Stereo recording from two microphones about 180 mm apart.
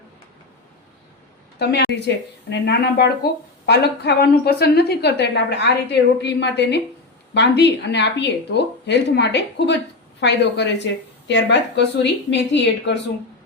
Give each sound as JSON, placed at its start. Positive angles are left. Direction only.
{"t": 1.5, "sound": "a woman's voice", "side_deg": 65}